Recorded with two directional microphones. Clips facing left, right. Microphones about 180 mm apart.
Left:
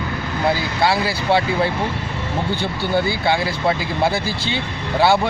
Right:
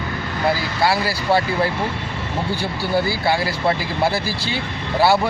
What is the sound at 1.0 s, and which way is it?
Speech, 20° left (ahead or behind).